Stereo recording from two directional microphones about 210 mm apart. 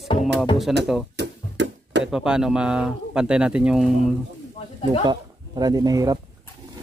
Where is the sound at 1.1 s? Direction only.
55° right (ahead or behind).